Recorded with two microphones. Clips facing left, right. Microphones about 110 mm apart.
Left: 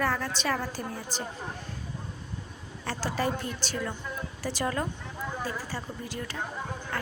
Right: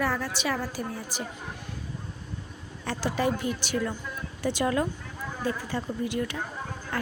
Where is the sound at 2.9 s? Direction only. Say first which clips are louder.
Right 3 dB; 15° right (ahead or behind).